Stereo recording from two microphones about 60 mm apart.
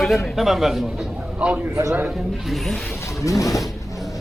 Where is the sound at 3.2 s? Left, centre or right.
Left.